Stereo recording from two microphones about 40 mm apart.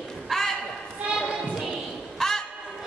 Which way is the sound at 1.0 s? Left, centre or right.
Right.